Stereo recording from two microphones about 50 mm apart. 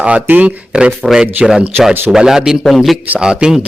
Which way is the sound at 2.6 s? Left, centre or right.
Centre.